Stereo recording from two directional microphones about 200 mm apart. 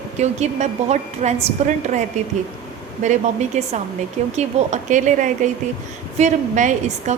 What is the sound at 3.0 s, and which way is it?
A woman's voice, 40° right (ahead or behind).